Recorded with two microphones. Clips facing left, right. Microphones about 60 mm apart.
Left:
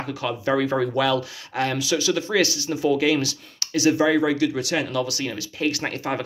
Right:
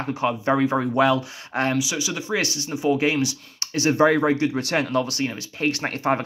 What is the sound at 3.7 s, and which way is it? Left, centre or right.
Speech, right.